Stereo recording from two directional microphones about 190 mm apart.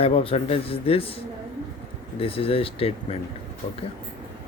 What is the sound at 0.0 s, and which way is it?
A man's voice, 30° left (ahead or behind).